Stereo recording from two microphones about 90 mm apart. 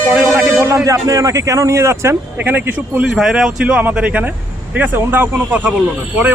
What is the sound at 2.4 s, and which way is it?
Speech, 20° right (ahead or behind).